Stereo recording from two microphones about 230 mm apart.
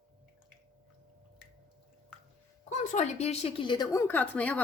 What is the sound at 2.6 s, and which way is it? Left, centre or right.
A woman's voice, left.